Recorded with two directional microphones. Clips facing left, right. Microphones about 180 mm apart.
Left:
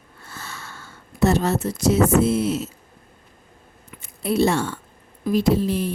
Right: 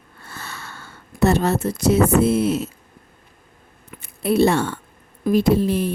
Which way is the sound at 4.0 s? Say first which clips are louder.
Right 3 dB; 60° right (ahead or behind).